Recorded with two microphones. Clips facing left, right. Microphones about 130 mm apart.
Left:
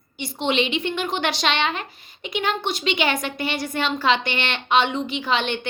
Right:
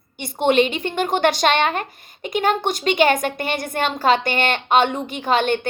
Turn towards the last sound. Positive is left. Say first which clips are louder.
# right 5 dB
turn(degrees=-45)  # may be behind; listen again after turning